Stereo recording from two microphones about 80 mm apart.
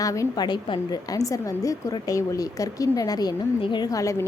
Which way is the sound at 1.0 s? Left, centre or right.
Left.